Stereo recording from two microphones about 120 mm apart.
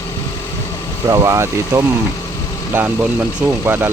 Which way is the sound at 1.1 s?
25° right (ahead or behind).